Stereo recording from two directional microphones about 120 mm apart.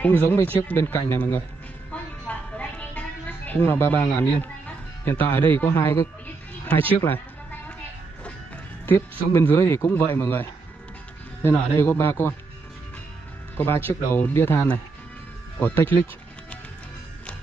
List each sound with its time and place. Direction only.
0.2 s speech: 15° left (ahead or behind)
1.9 s music: 10° left (ahead or behind)
6.9 s speech: 15° left (ahead or behind)
8.8 s speech: 20° left (ahead or behind)
13.6 s speech: 15° left (ahead or behind)